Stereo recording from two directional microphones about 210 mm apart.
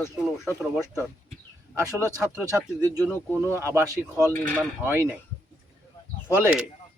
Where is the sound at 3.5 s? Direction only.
15° right (ahead or behind).